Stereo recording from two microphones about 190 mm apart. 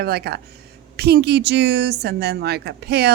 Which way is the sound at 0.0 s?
55° right (ahead or behind).